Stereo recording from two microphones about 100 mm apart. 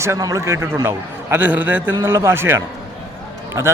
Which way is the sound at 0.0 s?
30° right (ahead or behind).